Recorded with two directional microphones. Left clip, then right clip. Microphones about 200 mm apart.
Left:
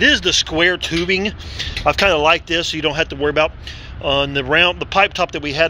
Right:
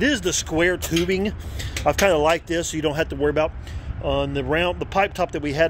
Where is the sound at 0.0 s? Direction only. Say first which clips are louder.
Left 8 dB; 10° right (ahead or behind).